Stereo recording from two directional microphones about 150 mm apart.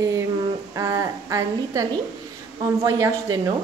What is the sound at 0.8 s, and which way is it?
Speech, 20° right (ahead or behind).